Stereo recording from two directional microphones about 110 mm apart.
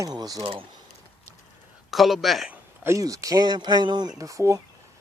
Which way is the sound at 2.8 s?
30° right (ahead or behind).